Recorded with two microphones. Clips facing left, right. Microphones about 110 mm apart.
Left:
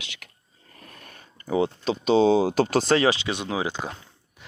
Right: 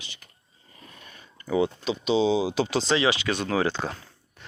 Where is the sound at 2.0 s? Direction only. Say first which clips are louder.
Left 4 dB; 50° left (ahead or behind).